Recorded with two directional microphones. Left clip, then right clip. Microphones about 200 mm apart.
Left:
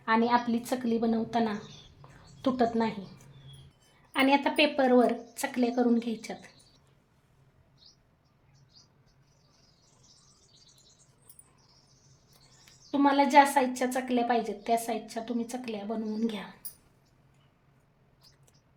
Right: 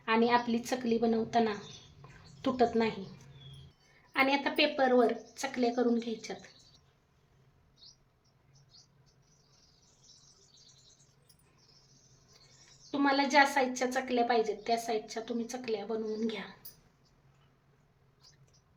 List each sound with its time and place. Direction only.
0.0 s a woman's voice: 15° left (ahead or behind)
4.1 s a woman's voice: 30° left (ahead or behind)
12.9 s a woman's voice: 20° left (ahead or behind)